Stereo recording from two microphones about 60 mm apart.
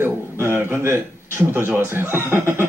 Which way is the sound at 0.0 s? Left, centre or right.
Right.